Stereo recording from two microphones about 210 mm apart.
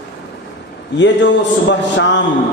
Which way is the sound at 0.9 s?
60° left (ahead or behind).